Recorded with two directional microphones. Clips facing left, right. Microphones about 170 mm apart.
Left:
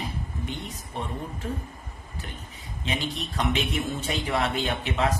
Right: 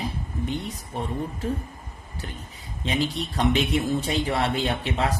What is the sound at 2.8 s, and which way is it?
A man's voice, 35° right (ahead or behind).